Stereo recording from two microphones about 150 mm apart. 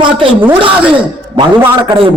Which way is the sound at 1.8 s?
35° right (ahead or behind).